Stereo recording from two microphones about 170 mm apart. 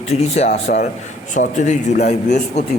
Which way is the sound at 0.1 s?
40° left (ahead or behind).